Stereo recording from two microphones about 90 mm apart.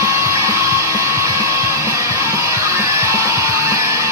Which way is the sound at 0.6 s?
35° right (ahead or behind).